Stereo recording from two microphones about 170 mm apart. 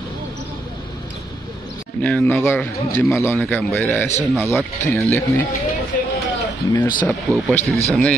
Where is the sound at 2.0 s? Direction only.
10° left (ahead or behind).